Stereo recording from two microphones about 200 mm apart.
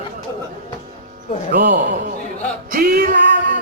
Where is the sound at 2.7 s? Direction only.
45° right (ahead or behind).